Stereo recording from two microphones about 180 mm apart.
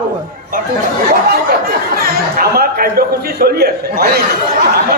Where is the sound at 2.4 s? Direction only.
55° right (ahead or behind).